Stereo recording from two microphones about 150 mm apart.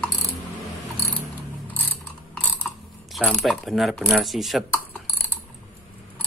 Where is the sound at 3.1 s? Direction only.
Centre (ahead or behind).